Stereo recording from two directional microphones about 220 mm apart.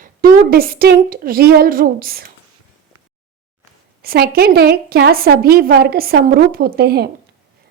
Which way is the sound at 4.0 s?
45° right (ahead or behind).